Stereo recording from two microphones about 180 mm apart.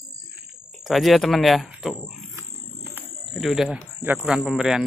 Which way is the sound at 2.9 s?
Centre (ahead or behind).